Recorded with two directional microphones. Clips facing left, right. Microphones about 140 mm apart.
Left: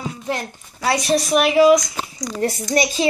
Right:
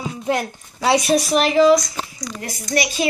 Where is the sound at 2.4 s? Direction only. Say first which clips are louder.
Left 4 dB; 30° left (ahead or behind).